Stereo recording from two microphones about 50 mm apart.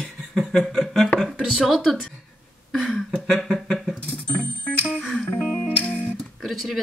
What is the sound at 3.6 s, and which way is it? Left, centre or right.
Mechanisms, centre.